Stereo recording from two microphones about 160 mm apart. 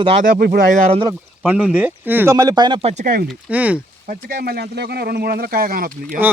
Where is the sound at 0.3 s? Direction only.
90° right.